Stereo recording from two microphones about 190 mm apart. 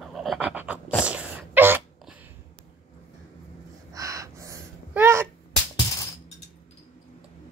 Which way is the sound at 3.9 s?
15° right (ahead or behind).